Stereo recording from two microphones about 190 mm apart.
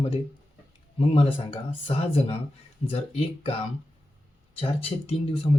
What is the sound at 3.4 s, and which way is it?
Speech, 30° left (ahead or behind).